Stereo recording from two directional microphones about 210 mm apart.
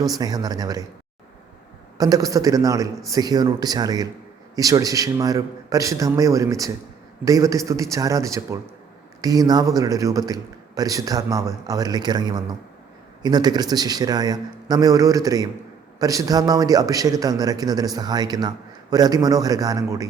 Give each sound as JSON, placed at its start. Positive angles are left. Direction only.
{"t": 0.2, "sound": "a man's voice", "side_deg": -20}
{"t": 2.0, "sound": "a man's voice", "side_deg": -15}